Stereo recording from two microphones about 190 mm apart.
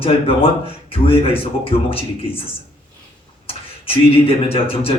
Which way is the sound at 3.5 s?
30° left (ahead or behind).